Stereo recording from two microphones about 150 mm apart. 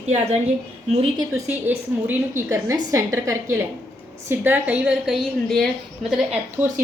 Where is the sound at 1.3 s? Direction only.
15° right (ahead or behind).